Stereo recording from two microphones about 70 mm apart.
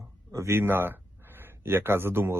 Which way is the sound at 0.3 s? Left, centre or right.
Right.